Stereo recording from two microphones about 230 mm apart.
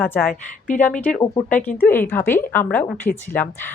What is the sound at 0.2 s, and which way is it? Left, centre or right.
Speech, left.